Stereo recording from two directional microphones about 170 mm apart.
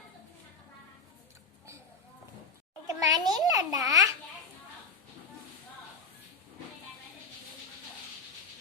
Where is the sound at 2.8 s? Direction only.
20° right (ahead or behind).